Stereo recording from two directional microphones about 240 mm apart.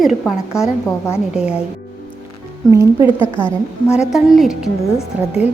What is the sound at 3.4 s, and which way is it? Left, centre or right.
A woman's voice, centre.